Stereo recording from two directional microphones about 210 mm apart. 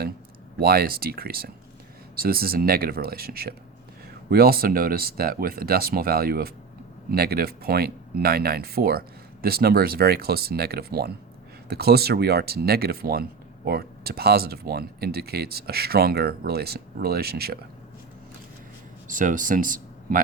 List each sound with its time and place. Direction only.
0.6 s speech: 45° right (ahead or behind)
19.0 s speech: 40° right (ahead or behind)